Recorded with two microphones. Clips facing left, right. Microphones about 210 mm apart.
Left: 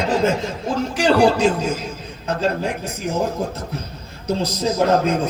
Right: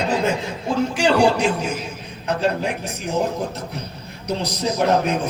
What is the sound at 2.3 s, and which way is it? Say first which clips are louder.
Speech: even; 15° right (ahead or behind).